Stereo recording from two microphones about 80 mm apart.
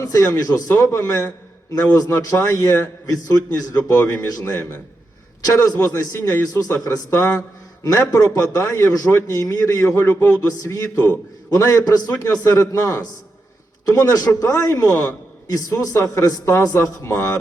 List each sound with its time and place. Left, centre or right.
0.0 s a man's voice: left
10.6 s a man's voice: left
14.4 s a man's voice: left
16.7 s a man's voice: left